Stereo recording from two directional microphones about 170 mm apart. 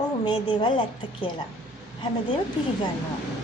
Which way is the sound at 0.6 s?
30° left (ahead or behind).